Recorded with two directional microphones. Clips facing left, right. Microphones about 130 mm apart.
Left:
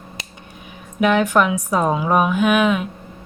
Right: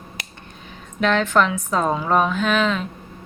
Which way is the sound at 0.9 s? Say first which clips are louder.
Left 2 dB; 10° left (ahead or behind).